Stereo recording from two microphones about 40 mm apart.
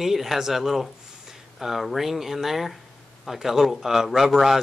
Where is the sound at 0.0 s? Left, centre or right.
Centre.